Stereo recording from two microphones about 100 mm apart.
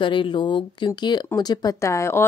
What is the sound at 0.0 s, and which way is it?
Speech, 55° left (ahead or behind).